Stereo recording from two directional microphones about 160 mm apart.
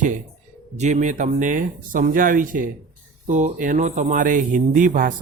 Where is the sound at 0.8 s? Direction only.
50° right (ahead or behind).